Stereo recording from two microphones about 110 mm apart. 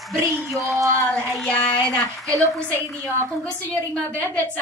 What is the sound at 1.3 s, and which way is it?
Child singing, 10° left (ahead or behind).